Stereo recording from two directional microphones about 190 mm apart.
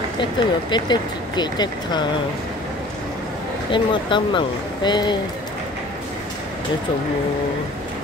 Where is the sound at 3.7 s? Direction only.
25° left (ahead or behind).